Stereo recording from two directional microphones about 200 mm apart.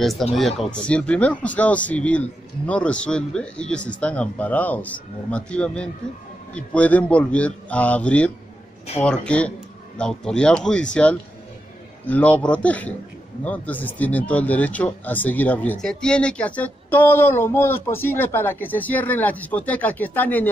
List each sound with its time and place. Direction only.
0.0 s speech: centre (ahead or behind)